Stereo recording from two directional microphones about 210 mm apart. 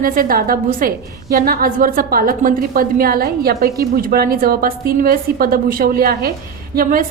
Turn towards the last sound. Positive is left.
turn(degrees=-40)  # may be behind; listen again after turning